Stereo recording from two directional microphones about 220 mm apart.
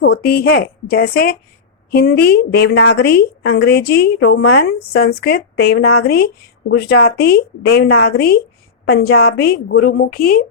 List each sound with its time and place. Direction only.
0.0 s a woman's voice: 45° left (ahead or behind)